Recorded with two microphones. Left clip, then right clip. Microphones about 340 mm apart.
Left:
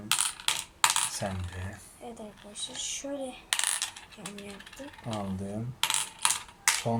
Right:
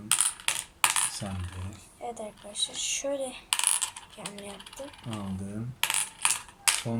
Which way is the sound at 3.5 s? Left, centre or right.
Centre.